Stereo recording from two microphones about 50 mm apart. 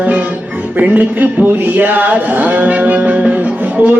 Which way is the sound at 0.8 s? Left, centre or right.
Right.